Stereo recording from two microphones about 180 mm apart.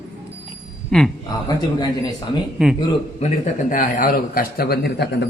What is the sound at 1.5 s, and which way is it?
Speech, 20° left (ahead or behind).